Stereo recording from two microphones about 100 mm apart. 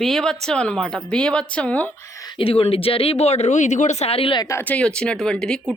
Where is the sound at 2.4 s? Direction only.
70° left (ahead or behind); by 3.5 s 90° left.